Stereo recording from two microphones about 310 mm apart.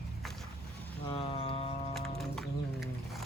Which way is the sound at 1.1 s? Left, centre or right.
Centre.